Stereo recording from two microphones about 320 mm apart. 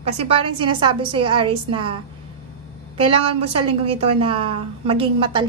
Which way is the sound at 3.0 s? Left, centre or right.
Centre.